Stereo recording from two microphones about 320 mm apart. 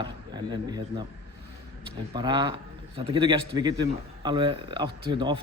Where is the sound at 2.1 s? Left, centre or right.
Centre.